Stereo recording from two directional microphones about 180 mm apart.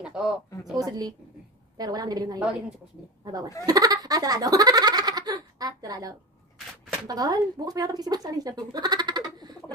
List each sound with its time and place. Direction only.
0.0 s speech: 5° right (ahead or behind)
0.7 s speech: 20° right (ahead or behind)
3.6 s speech: 20° right (ahead or behind)